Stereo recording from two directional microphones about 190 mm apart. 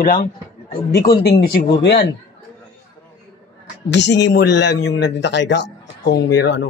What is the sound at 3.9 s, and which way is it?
A man's voice, 65° left (ahead or behind).